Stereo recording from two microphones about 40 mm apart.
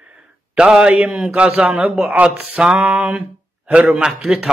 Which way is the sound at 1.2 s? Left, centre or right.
Right.